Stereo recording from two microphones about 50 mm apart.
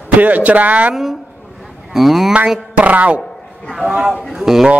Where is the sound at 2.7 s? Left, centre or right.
Right.